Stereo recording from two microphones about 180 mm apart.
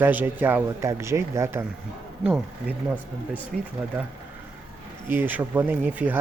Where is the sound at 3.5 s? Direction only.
50° right (ahead or behind).